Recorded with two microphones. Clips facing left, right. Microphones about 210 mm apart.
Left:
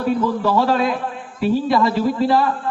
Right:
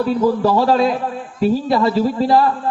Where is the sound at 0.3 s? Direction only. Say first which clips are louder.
Right 3 dB; 40° right (ahead or behind).